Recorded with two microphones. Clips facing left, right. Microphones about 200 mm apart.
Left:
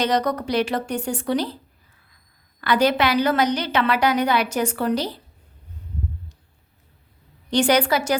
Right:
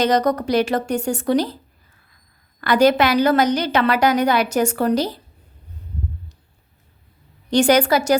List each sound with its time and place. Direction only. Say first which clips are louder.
0.0 s a woman's voice: right 4 dB; 45° right (ahead or behind)
2.6 s a woman's voice: right 4 dB; 45° right (ahead or behind)
7.5 s a woman's voice: right 3 dB; 45° right (ahead or behind)